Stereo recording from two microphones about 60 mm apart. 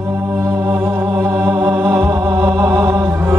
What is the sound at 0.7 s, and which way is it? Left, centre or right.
Music, right.